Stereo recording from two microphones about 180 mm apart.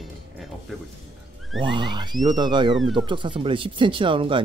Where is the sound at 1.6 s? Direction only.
25° right (ahead or behind).